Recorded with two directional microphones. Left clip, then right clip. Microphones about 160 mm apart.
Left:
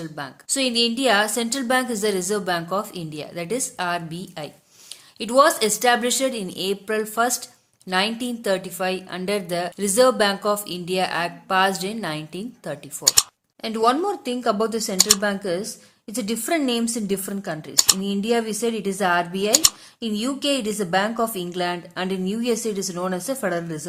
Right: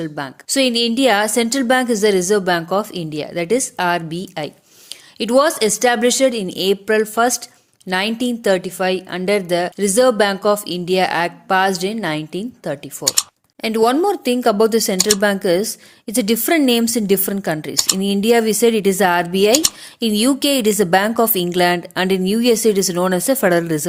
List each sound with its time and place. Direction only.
0.0 s a woman's voice: 35° right (ahead or behind)
14.9 s speech: centre (ahead or behind)
15.2 s a woman's voice: 40° right (ahead or behind)
17.7 s speech: centre (ahead or behind)
18.0 s a woman's voice: 40° right (ahead or behind)